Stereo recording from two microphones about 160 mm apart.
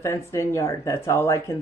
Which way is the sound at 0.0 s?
15° left (ahead or behind).